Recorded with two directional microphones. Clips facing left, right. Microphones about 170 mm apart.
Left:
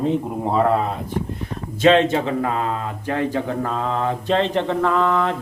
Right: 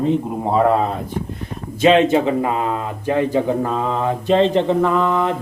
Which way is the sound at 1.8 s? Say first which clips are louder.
Right 2 dB; 10° right (ahead or behind).